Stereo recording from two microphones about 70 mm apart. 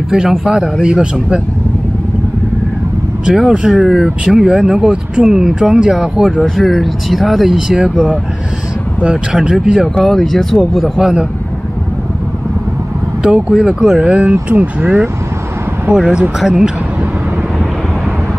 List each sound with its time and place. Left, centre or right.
0.1 s speech: centre
3.3 s speech: centre
9.0 s speech: centre
9.9 s speech: centre
10.7 s speech: centre
13.2 s speech: centre
14.3 s speech: right; by 16.7 s centre